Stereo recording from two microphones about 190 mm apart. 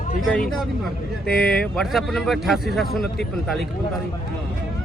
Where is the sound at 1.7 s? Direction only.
Centre (ahead or behind).